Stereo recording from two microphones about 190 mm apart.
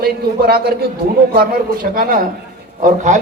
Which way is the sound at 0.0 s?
55° right (ahead or behind).